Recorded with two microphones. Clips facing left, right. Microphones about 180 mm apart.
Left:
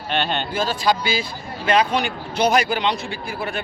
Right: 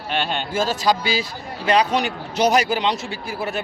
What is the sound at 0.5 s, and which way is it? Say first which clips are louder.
A man's voice: right 2 dB; 45° right (ahead or behind).